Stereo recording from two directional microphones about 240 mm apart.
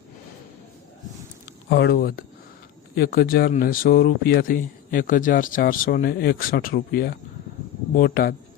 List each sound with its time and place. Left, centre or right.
1.7 s speech: left